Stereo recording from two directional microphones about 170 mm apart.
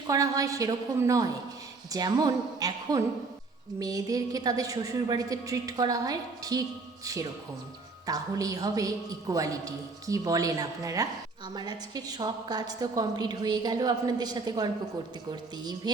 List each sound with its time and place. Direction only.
0.1 s a woman's voice: 20° right (ahead or behind)